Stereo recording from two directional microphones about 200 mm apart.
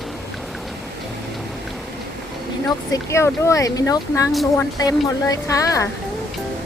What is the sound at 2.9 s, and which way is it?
A woman's voice, 15° left (ahead or behind).